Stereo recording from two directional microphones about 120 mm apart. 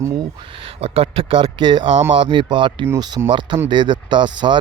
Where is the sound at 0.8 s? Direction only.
55° right (ahead or behind).